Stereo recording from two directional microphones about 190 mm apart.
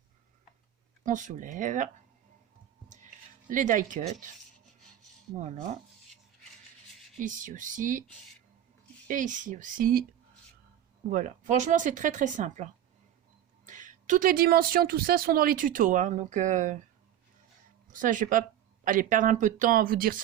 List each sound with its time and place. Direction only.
1.0 s speech: 40° right (ahead or behind)
3.5 s speech: 45° right (ahead or behind)
7.2 s speech: 45° right (ahead or behind)
9.0 s speech: 45° right (ahead or behind)
11.1 s speech: 40° right (ahead or behind)
13.7 s speech: 40° right (ahead or behind)
17.9 s speech: 45° right (ahead or behind)